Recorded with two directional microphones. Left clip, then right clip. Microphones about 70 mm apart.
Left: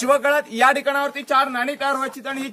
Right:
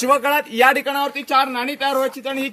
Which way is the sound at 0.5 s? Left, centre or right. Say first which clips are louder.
Right 4 dB; left.